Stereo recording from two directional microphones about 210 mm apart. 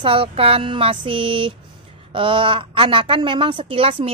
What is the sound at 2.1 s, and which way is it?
Speech, 25° right (ahead or behind).